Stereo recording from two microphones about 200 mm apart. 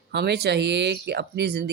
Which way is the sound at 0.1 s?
55° right (ahead or behind).